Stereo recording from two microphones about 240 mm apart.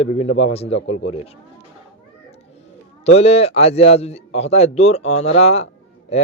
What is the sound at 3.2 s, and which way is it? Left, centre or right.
Speech, left.